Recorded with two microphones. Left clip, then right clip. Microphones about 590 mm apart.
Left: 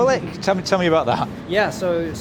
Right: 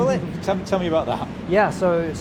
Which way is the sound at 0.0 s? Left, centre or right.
Left.